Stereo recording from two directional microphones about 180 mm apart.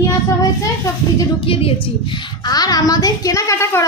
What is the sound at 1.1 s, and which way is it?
A woman's voice, 30° left (ahead or behind).